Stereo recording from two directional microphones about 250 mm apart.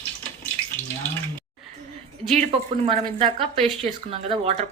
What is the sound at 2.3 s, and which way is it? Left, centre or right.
A woman's voice, right.